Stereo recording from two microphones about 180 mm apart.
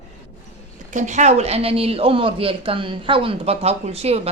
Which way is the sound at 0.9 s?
40° right (ahead or behind).